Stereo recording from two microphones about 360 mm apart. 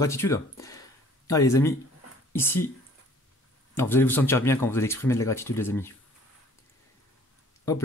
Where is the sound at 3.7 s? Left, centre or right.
Centre.